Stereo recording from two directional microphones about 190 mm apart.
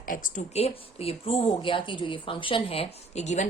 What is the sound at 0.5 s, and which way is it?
A woman's voice, 30° left (ahead or behind).